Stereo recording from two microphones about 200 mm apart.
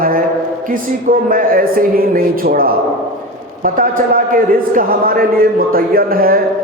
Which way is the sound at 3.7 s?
45° right (ahead or behind).